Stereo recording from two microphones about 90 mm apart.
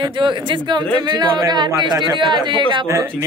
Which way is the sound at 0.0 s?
60° right (ahead or behind).